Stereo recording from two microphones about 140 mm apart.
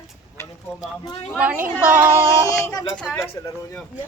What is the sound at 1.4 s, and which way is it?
Speech, 10° right (ahead or behind).